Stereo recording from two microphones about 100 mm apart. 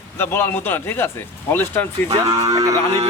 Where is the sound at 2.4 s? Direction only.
35° right (ahead or behind).